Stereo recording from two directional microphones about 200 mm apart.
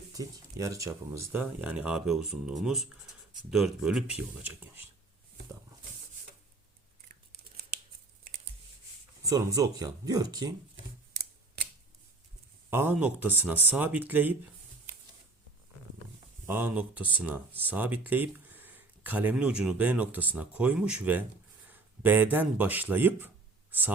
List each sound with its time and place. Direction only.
0.1 s speech: 15° right (ahead or behind)
9.2 s speech: 20° right (ahead or behind)
12.7 s speech: 10° right (ahead or behind)
16.5 s speech: 10° right (ahead or behind)